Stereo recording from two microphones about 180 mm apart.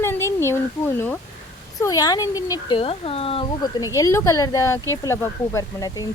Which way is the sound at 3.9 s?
15° left (ahead or behind).